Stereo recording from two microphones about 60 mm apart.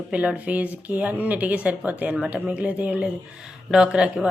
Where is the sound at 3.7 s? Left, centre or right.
Centre.